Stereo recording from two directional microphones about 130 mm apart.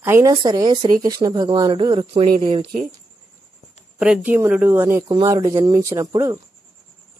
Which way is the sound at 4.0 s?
10° right (ahead or behind).